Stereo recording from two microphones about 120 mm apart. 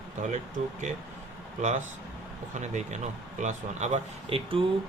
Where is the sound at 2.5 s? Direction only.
85° right.